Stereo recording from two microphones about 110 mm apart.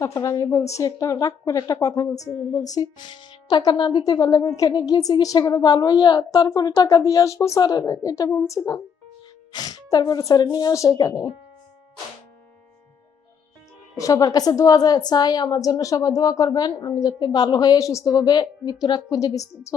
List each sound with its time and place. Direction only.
0.0 s a woman's voice: 30° left (ahead or behind)
3.1 s a woman's voice: 50° left (ahead or behind)
8.3 s a woman's voice: 25° left (ahead or behind)
13.9 s a woman's voice: 30° left (ahead or behind)